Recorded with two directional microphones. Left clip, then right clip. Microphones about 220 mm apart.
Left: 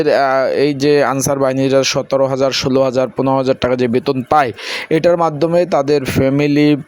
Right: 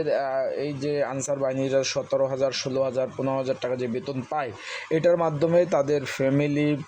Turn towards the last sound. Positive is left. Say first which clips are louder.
# left 11 dB
turn(degrees=30)  # may be behind; listen again after turning